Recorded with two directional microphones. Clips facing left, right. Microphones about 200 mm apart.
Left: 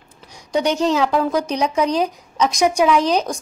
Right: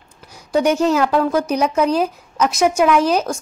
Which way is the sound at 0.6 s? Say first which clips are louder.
Right 2 dB; 10° right (ahead or behind).